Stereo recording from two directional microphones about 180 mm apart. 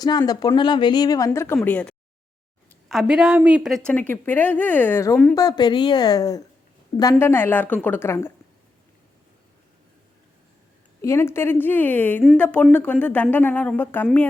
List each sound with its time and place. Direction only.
0.0 s a woman's voice: 20° left (ahead or behind); by 3.8 s 5° right (ahead or behind)
3.8 s a woman's voice: 10° left (ahead or behind)
11.0 s a woman's voice: 15° left (ahead or behind)